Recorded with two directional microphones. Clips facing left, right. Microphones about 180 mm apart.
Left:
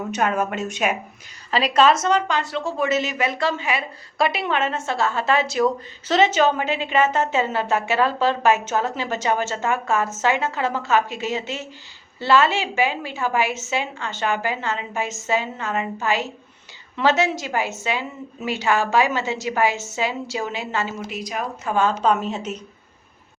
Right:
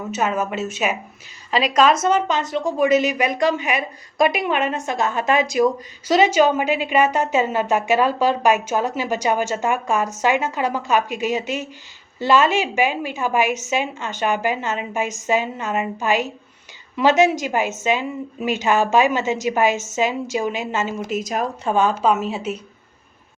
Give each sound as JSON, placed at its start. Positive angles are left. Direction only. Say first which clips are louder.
{"t": 0.1, "sound": "speech", "louder": "right 1 dB", "side_deg": -5}
{"t": 1.7, "sound": "speech", "louder": "right 1 dB", "side_deg": -15}
{"t": 21.1, "sound": "a woman's voice", "louder": "right 5 dB", "side_deg": -45}
{"t": 21.6, "sound": "speech", "louder": "right 1 dB", "side_deg": -20}
{"t": 21.9, "sound": "speech", "louder": "right 1 dB", "side_deg": -5}